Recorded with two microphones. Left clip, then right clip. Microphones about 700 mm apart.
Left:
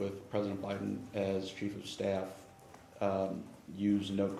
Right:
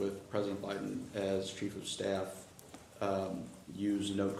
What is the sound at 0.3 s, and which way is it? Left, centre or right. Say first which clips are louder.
Speech: even; left.